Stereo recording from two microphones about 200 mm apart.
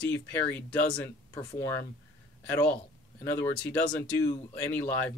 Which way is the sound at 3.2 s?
10° left (ahead or behind).